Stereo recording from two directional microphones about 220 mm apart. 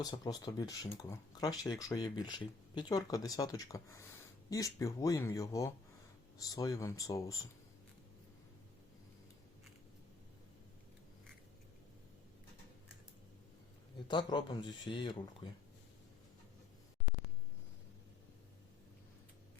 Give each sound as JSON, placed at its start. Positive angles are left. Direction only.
{"t": 0.0, "sound": "speech", "side_deg": 15}
{"t": 14.1, "sound": "speech", "side_deg": 20}